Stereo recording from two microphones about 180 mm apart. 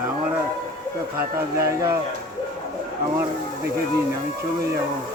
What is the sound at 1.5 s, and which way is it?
Speech, 15° right (ahead or behind).